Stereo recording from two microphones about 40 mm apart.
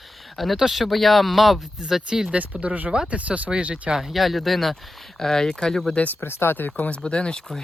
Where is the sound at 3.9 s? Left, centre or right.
Centre.